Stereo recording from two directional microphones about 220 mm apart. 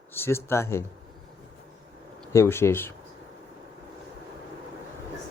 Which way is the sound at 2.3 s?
10° left (ahead or behind).